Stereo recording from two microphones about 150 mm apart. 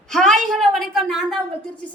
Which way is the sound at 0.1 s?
5° left (ahead or behind).